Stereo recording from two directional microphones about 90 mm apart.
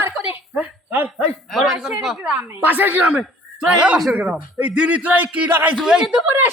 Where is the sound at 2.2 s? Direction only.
15° right (ahead or behind).